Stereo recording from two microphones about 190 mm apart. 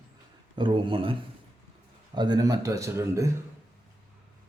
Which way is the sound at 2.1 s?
20° right (ahead or behind).